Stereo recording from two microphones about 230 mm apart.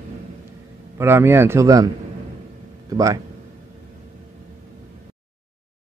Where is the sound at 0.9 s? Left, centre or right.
Centre.